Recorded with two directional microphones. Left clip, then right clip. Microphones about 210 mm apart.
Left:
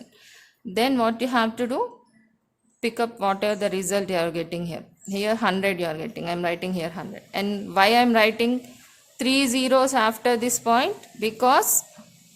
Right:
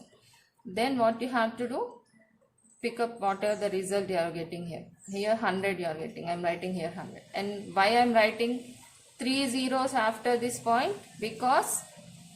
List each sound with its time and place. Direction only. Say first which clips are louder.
0.7 s speech: left 5 dB; 50° left (ahead or behind)
2.8 s speech: left 6 dB; 45° left (ahead or behind)